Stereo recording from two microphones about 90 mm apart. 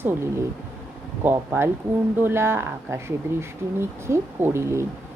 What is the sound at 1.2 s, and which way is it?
A woman's voice, 20° right (ahead or behind).